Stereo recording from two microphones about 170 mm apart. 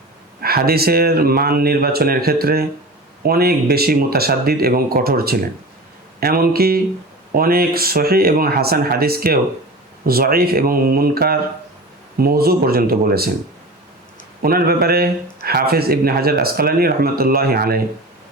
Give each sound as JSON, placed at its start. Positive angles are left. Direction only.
{"t": 0.4, "sound": "speech", "side_deg": -65}
{"t": 14.4, "sound": "speech", "side_deg": -65}